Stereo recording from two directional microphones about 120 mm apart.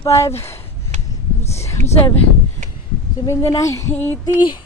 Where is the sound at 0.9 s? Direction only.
70° right (ahead or behind).